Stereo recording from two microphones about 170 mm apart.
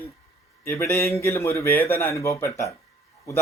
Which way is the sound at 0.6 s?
15° left (ahead or behind).